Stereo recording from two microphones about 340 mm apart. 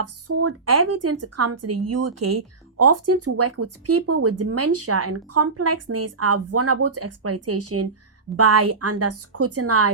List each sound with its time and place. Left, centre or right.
0.0 s speech: right